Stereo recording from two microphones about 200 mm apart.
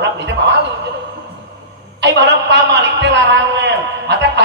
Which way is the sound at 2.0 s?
60° right (ahead or behind).